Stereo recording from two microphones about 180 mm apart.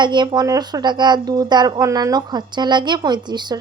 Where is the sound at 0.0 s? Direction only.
25° right (ahead or behind).